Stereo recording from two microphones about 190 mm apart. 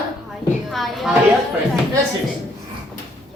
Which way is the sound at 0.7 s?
Centre (ahead or behind).